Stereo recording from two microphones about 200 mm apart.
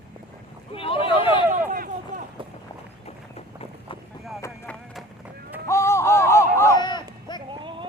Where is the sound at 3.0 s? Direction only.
30° left (ahead or behind).